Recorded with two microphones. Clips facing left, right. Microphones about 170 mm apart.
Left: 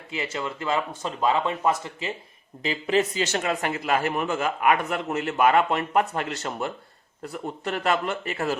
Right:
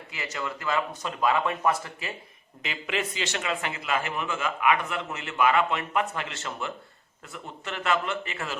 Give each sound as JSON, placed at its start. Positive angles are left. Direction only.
{"t": 0.1, "sound": "speech", "side_deg": 25}
{"t": 2.6, "sound": "speech", "side_deg": 35}